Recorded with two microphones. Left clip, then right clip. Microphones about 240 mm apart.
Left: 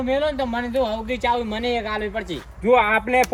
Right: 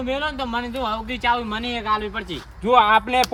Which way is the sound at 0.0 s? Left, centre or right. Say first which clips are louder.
Left 3 dB; right.